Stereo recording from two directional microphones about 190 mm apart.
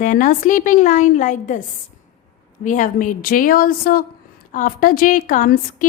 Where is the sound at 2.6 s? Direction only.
40° left (ahead or behind).